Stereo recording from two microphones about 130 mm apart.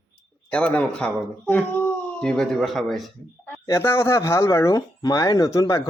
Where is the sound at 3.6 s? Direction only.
20° left (ahead or behind).